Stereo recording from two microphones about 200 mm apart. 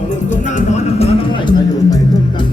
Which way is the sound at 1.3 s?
25° left (ahead or behind).